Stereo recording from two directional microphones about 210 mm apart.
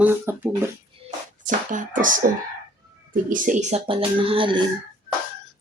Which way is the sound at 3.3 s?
35° right (ahead or behind).